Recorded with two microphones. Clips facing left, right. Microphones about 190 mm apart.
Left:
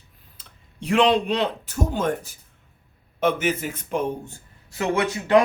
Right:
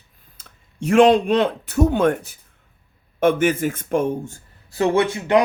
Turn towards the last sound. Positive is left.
turn(degrees=-25)  # may be behind; listen again after turning